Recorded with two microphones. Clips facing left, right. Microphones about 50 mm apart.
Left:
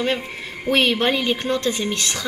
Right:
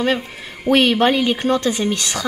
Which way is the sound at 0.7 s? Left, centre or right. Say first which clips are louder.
Right 4 dB; right.